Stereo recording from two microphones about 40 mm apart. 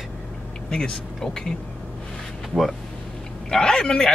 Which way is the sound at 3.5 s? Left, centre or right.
Centre.